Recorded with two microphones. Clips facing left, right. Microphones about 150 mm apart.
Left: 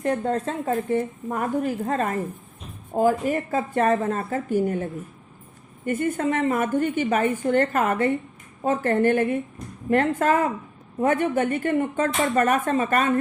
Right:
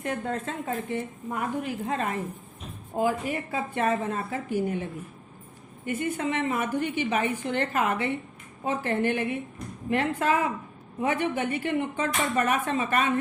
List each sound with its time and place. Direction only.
0.0 s a woman's voice: 35° left (ahead or behind)